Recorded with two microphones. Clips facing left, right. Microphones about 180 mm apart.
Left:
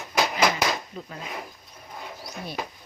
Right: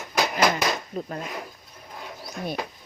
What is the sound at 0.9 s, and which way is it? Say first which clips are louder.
Speech: right 7 dB; 45° right (ahead or behind).